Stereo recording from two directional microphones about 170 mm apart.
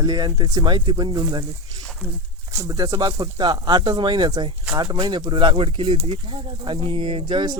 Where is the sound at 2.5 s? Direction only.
20° right (ahead or behind).